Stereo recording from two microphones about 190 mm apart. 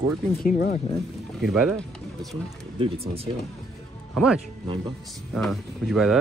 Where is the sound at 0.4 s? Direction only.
45° left (ahead or behind).